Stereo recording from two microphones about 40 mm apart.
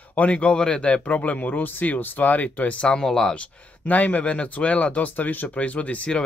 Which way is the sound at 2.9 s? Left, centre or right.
Centre.